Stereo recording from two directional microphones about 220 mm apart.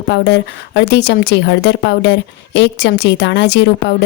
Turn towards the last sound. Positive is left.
turn(degrees=50)  # may be behind; listen again after turning